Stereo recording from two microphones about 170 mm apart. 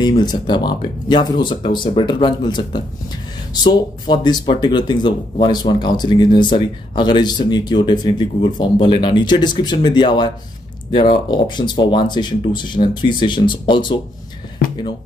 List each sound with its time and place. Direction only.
0.0 s speech: 25° left (ahead or behind)